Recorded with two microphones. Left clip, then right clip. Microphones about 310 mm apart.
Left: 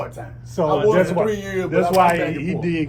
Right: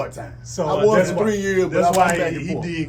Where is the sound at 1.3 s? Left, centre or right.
Right.